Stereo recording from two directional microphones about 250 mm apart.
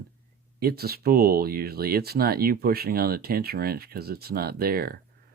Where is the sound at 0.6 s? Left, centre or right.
Right.